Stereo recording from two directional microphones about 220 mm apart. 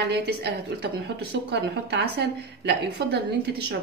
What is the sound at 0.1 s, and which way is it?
Speech, 50° right (ahead or behind).